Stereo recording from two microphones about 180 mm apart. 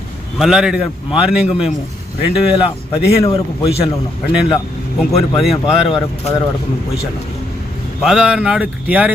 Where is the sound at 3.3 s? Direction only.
35° left (ahead or behind).